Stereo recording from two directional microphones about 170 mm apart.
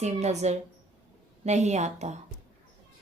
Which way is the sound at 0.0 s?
40° right (ahead or behind).